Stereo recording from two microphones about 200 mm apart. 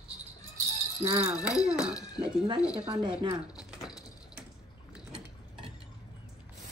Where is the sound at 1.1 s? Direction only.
30° right (ahead or behind).